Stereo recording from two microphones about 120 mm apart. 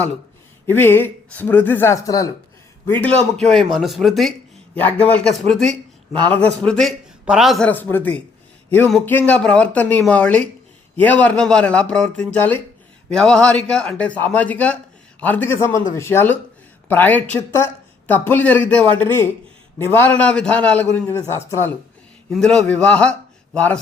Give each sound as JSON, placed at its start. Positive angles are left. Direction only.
{"t": 0.7, "sound": "a man's voice", "side_deg": 20}
{"t": 2.8, "sound": "speech", "side_deg": 15}
{"t": 4.7, "sound": "a man's voice", "side_deg": 15}
{"t": 7.7, "sound": "a man's voice", "side_deg": 15}
{"t": 22.3, "sound": "a man's voice", "side_deg": 5}